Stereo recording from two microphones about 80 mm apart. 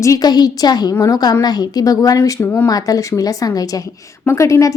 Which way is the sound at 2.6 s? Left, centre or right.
Left.